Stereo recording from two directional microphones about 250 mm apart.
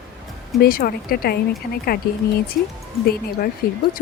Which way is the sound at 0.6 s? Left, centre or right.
Left.